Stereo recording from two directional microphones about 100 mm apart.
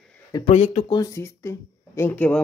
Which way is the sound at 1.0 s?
30° left (ahead or behind).